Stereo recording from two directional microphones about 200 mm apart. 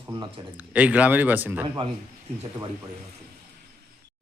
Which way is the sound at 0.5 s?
5° right (ahead or behind).